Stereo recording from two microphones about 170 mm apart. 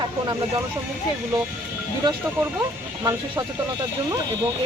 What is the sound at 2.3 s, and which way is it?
Speech, 15° right (ahead or behind).